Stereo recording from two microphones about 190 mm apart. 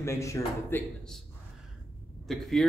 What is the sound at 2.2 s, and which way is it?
Speech, centre (ahead or behind).